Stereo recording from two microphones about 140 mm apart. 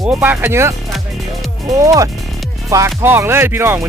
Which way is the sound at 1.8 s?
25° right (ahead or behind).